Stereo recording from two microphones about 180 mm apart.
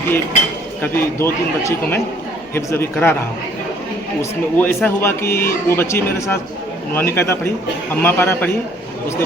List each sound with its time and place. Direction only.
0.8 s speech: 15° left (ahead or behind)
4.2 s speech: 10° left (ahead or behind)